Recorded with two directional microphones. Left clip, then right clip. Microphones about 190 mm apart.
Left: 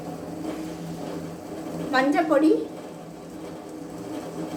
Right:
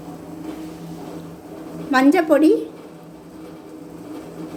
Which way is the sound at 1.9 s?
40° right (ahead or behind).